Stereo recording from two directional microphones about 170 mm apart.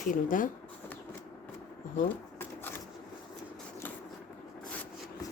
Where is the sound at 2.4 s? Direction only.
15° left (ahead or behind).